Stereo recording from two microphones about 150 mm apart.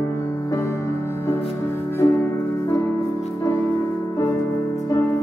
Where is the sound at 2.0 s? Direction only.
20° left (ahead or behind).